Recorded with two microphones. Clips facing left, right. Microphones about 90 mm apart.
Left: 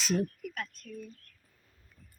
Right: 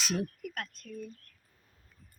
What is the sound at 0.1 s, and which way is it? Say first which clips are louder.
Speech: left 6 dB; 65° right (ahead or behind).